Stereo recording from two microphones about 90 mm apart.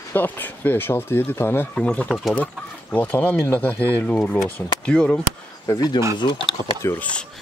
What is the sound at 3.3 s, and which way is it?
Speech, 30° left (ahead or behind).